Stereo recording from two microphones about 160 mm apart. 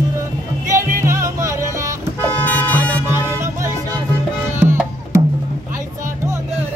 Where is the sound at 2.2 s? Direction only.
10° left (ahead or behind).